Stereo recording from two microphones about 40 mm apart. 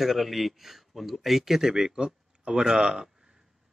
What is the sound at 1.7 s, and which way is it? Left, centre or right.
Speech, centre.